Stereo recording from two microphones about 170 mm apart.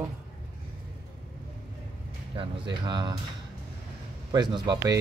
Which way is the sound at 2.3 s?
25° right (ahead or behind).